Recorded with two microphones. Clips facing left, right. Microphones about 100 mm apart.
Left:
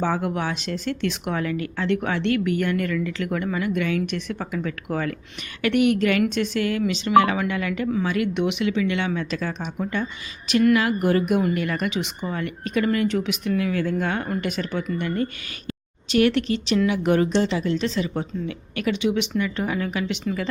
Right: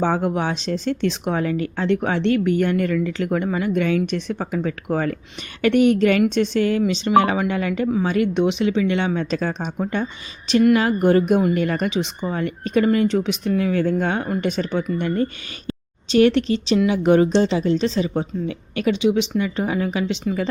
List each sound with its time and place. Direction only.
0.0 s speech: 25° right (ahead or behind)